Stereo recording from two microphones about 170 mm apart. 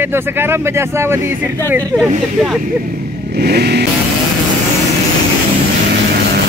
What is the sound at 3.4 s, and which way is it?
Vehicle, 70° right (ahead or behind).